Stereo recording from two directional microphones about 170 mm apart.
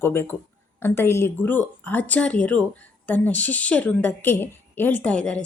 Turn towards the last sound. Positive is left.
turn(degrees=5)  # may be behind; listen again after turning